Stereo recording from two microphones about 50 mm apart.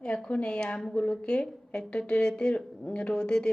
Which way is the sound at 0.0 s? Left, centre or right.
Left.